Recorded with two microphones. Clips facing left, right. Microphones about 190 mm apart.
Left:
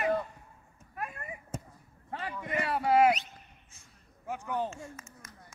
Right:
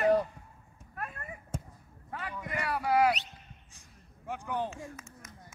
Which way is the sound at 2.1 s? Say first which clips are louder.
Left 2 dB; 30° left (ahead or behind).